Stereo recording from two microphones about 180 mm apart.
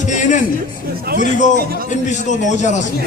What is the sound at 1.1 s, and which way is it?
Speech, 60° right (ahead or behind).